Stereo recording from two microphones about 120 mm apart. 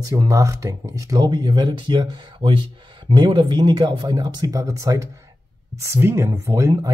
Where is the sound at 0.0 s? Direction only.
30° right (ahead or behind).